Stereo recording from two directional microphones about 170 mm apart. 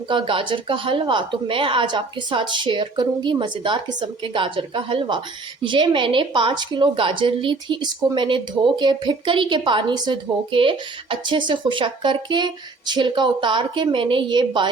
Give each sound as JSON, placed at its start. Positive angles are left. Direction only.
{"t": 0.1, "sound": "a woman's voice", "side_deg": -30}